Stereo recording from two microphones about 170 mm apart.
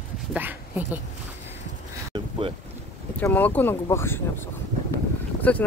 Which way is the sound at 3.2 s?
10° left (ahead or behind).